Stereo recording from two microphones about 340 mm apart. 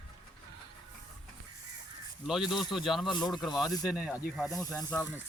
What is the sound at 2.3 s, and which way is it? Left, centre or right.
Speech, centre.